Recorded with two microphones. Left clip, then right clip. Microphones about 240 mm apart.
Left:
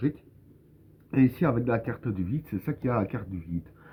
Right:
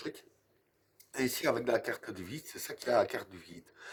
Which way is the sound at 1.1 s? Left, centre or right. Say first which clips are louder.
Left 6 dB; right.